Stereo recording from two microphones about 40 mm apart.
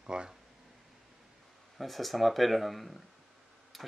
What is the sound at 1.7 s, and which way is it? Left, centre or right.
Speech, centre.